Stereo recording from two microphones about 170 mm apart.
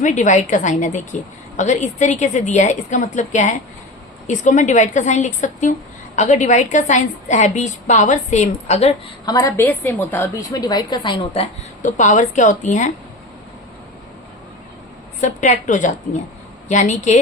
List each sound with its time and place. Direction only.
0.0 s a woman's voice: 45° left (ahead or behind)
9.2 s a woman's voice: 20° left (ahead or behind)
10.6 s a woman's voice: 25° left (ahead or behind)
11.8 s a woman's voice: 45° left (ahead or behind)
15.2 s a woman's voice: 45° left (ahead or behind)